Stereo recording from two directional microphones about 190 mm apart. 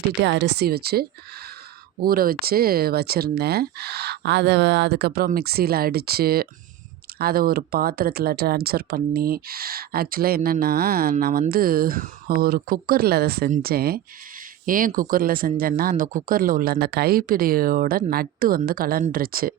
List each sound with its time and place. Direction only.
0.3 s speech: 60° right (ahead or behind)